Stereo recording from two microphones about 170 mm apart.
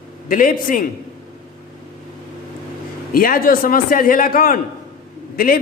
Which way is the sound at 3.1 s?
60° left (ahead or behind).